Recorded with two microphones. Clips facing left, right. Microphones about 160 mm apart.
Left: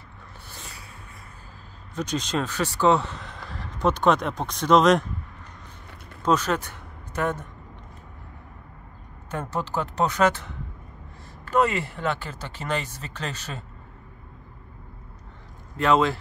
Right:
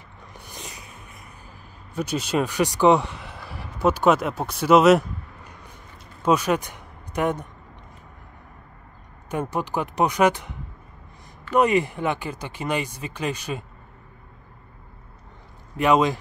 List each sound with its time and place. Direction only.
0.5 s music: 15° right (ahead or behind)
2.0 s speech: 10° right (ahead or behind)
6.2 s speech: 10° right (ahead or behind)
9.3 s speech: 15° right (ahead or behind)
11.5 s speech: 15° right (ahead or behind)
15.8 s speech: 15° right (ahead or behind)